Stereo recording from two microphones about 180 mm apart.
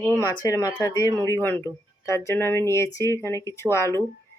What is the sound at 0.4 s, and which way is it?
Speech, 20° left (ahead or behind).